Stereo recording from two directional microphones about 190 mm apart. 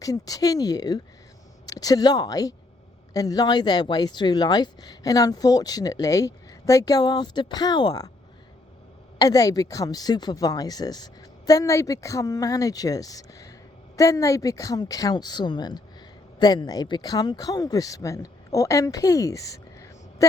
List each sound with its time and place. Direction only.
0.0 s speech: 20° left (ahead or behind)
9.1 s speech: 20° left (ahead or behind)